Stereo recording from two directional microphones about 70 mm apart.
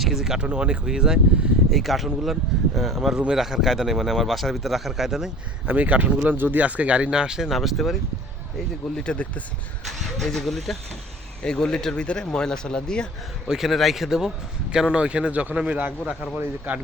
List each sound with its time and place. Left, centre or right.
0.0 s speech: centre
0.3 s a man's voice: centre
1.7 s speech: centre
5.6 s a man's voice: right; by 7.9 s centre
9.0 s speech: centre
13.5 s a man's voice: centre